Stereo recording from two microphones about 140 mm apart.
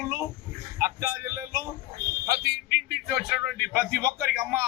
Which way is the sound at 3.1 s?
5° right (ahead or behind).